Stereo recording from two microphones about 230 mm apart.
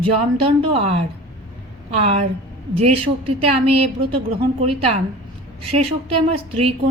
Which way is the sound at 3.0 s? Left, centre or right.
Right.